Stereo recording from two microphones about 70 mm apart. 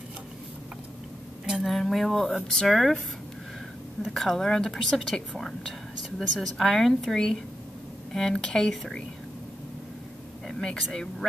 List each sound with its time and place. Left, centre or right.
1.6 s a woman's voice: centre
4.1 s a woman's voice: centre
10.5 s speech: centre